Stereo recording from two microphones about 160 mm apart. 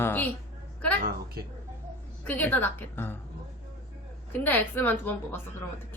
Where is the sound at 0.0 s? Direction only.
10° left (ahead or behind).